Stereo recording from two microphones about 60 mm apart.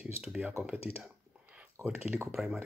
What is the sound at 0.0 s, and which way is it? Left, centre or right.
Speech, centre.